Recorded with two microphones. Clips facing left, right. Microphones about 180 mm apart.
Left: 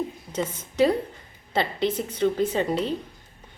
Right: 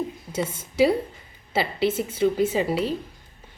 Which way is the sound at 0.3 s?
10° right (ahead or behind).